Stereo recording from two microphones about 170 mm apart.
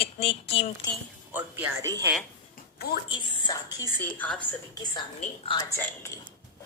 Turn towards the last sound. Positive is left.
turn(degrees=15)  # may be behind; listen again after turning